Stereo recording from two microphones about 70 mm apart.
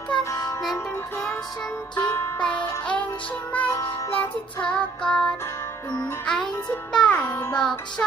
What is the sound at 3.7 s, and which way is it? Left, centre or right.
Music, left.